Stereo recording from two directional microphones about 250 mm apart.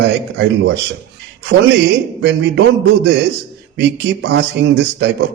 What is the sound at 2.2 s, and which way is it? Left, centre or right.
Speech, right.